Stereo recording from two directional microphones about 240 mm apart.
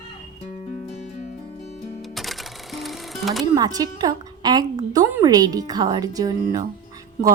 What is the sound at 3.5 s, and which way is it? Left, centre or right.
A woman's voice, centre.